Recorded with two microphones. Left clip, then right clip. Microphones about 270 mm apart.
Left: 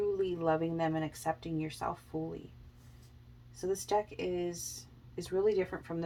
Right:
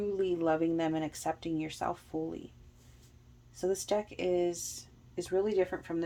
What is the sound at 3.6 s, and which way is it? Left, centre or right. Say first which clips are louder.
Speech: right 1 dB; right.